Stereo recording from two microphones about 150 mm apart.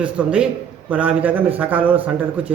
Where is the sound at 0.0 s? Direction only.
10° right (ahead or behind).